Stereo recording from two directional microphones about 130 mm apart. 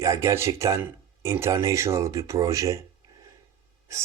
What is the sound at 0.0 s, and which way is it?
Speech, 20° right (ahead or behind).